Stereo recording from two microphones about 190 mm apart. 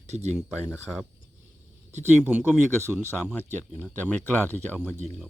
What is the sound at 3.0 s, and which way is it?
Speech, 10° left (ahead or behind).